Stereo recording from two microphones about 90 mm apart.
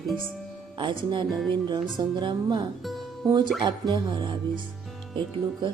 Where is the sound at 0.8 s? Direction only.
65° right (ahead or behind).